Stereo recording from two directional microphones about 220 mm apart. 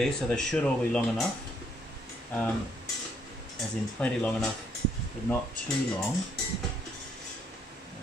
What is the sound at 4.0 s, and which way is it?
Speech, 5° left (ahead or behind).